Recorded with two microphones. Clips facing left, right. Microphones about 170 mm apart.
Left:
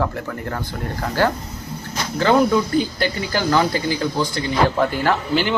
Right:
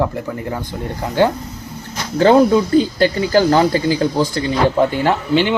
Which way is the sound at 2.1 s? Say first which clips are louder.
Right 5 dB; 30° right (ahead or behind).